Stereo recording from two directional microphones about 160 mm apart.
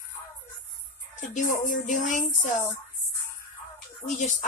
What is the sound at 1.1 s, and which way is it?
Speech, 55° left (ahead or behind).